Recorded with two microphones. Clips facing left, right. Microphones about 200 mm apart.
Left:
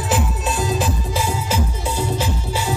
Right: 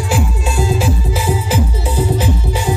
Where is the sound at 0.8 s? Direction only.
10° right (ahead or behind).